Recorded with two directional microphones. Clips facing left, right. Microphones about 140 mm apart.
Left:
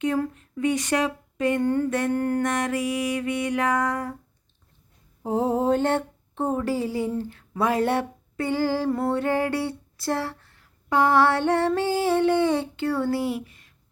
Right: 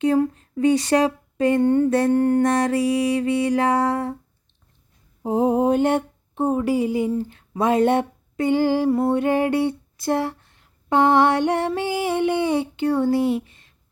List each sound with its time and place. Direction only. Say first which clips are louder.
0.0 s speech: right 6 dB; 30° right (ahead or behind)
1.9 s music: right 6 dB; 35° right (ahead or behind)
5.2 s a sound: right 4 dB; 15° right (ahead or behind)